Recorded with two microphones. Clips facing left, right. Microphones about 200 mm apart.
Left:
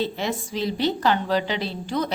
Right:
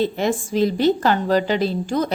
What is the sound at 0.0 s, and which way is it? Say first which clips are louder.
A woman's voice: right 6 dB; 50° right (ahead or behind).